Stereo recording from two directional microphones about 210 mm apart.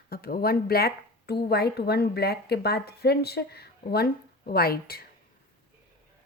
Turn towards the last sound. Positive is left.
turn(degrees=45)  # may be behind; listen again after turning